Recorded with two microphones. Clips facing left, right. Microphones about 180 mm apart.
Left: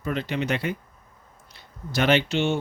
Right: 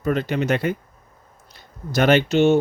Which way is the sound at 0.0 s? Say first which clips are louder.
Right 6 dB; 45° right (ahead or behind).